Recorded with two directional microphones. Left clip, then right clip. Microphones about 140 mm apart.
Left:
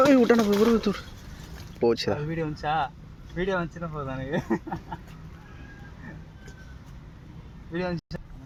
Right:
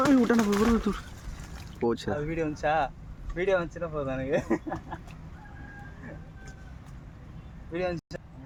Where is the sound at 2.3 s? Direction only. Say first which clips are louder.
Right 1 dB; 85° right.